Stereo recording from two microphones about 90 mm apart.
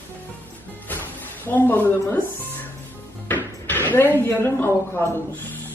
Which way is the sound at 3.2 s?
25° left (ahead or behind).